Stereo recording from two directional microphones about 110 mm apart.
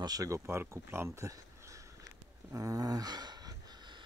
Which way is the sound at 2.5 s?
30° right (ahead or behind).